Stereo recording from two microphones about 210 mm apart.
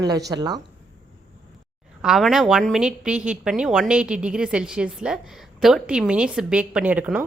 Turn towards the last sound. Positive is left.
turn(degrees=-5)  # may be behind; listen again after turning